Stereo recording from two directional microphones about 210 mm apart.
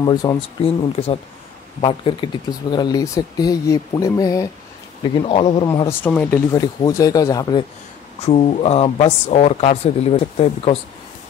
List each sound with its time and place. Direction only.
0.0 s speech: 20° left (ahead or behind)
5.2 s speech: 25° left (ahead or behind)
5.7 s speech: 10° left (ahead or behind)
8.3 s speech: 30° left (ahead or behind)